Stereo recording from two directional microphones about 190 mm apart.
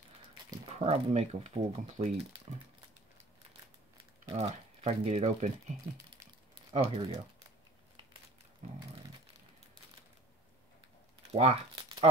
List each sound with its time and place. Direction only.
0.5 s speech: 30° right (ahead or behind)
4.4 s speech: 30° right (ahead or behind)
11.3 s speech: 35° right (ahead or behind)